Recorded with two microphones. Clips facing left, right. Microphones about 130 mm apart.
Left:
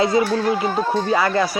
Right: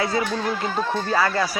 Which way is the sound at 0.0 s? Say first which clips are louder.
Left 6 dB; 15° left (ahead or behind).